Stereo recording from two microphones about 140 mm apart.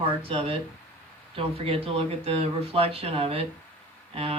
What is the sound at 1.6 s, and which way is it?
Speech, 45° right (ahead or behind).